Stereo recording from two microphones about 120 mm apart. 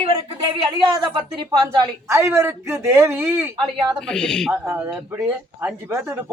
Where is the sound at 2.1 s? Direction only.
20° right (ahead or behind).